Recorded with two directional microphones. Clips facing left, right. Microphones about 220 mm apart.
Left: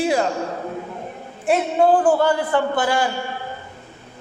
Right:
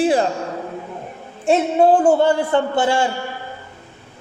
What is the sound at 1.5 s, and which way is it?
A man's voice, 25° right (ahead or behind).